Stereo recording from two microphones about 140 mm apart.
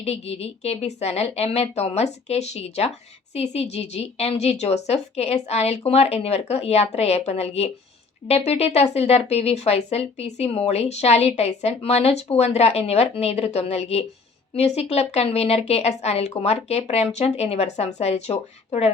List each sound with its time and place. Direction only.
0.0 s speech: 50° left (ahead or behind)